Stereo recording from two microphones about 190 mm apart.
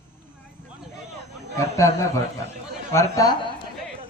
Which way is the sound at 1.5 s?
15° left (ahead or behind).